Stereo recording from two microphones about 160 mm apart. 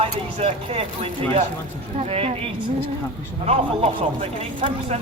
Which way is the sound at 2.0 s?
40° right (ahead or behind).